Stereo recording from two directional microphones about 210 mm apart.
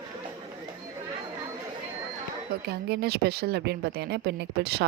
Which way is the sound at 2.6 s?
50° right (ahead or behind).